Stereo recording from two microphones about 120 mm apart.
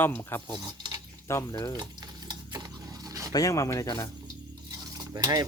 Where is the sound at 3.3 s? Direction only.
30° left (ahead or behind).